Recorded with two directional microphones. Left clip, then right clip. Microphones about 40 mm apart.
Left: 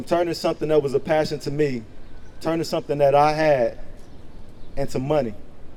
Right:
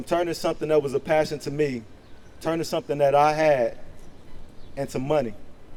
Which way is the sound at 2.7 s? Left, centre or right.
Centre.